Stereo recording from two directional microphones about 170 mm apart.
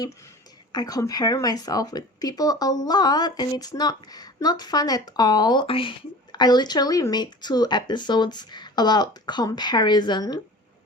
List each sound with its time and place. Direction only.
0.7 s speech: 25° left (ahead or behind)